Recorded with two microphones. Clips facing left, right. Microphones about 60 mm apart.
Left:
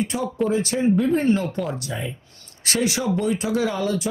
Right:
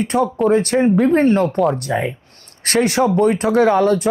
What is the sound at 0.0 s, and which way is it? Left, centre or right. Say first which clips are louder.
Speech: right 7 dB; right.